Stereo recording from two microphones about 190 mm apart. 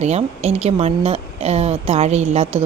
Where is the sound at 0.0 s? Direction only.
35° right (ahead or behind).